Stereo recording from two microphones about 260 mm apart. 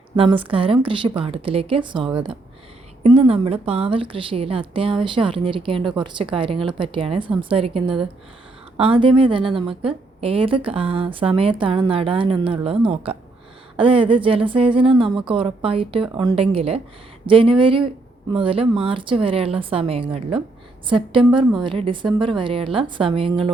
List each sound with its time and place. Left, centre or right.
0.2 s a woman's voice: centre